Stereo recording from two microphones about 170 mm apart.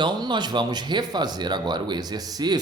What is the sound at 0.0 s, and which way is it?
Speech, 25° right (ahead or behind).